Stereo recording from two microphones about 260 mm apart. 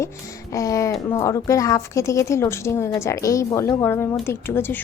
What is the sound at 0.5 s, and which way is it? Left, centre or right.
A woman's voice, centre.